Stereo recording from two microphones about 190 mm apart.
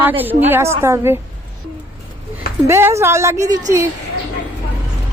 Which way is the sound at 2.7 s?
15° right (ahead or behind).